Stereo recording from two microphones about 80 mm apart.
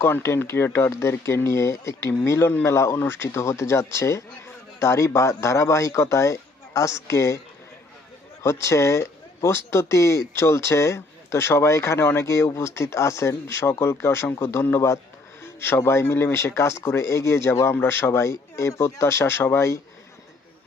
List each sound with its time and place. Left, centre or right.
0.0 s speech: left
8.4 s speech: left